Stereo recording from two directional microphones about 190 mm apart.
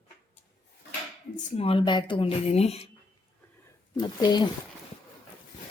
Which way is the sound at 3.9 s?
20° left (ahead or behind).